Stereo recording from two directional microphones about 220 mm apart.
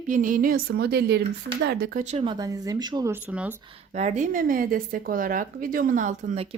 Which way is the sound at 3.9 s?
30° right (ahead or behind).